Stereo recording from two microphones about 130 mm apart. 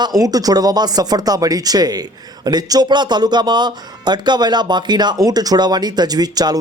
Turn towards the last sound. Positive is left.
turn(degrees=-30)  # may be behind; listen again after turning